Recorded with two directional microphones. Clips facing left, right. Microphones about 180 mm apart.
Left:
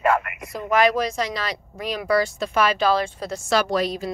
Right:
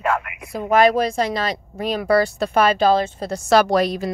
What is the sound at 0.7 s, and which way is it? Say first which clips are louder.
Speech: right 4 dB; 50° right (ahead or behind).